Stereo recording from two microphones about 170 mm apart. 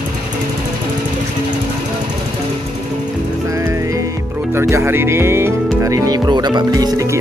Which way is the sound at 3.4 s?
20° right (ahead or behind).